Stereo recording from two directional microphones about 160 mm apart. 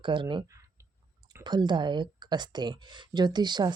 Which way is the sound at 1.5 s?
30° right (ahead or behind).